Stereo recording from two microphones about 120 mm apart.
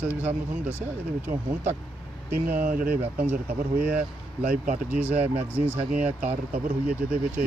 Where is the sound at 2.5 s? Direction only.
15° right (ahead or behind).